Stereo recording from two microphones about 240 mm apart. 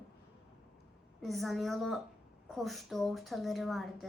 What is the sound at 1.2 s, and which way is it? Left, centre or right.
A woman's voice, centre.